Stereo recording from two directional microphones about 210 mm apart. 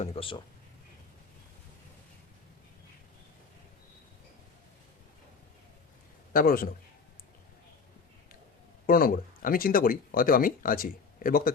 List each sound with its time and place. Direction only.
0.0 s speech: 25° left (ahead or behind)
6.3 s a man's voice: 45° left (ahead or behind)
8.9 s speech: 40° left (ahead or behind)